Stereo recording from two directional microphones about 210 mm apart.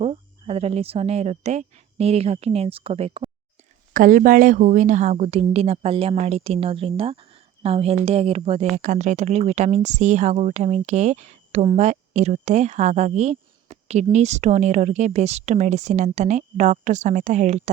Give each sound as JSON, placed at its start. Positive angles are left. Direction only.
{"t": 0.0, "sound": "a woman's voice", "side_deg": -30}
{"t": 3.9, "sound": "a woman's voice", "side_deg": -40}